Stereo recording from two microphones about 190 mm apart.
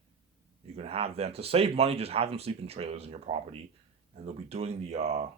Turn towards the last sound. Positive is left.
turn(degrees=-35)  # may be behind; listen again after turning